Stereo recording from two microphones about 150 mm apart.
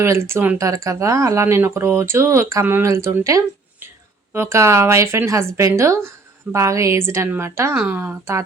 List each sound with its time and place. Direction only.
0.0 s speech: 20° right (ahead or behind)